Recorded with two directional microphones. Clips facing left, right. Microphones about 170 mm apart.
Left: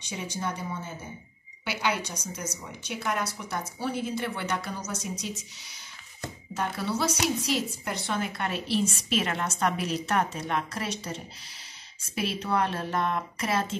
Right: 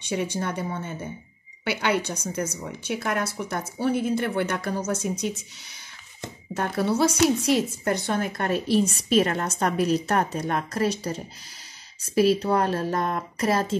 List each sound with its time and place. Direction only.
0.1 s a woman's voice: 60° right (ahead or behind)
6.5 s a woman's voice: 50° right (ahead or behind)